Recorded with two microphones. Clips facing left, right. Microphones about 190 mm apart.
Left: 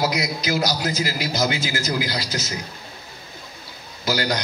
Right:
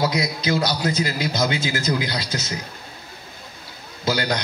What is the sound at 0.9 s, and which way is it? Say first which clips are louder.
A man's voice: right 1 dB; 25° right (ahead or behind).